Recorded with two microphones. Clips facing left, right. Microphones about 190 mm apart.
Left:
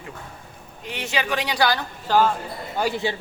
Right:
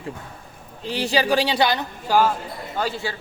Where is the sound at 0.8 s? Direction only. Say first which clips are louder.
Right 6 dB; 30° right (ahead or behind).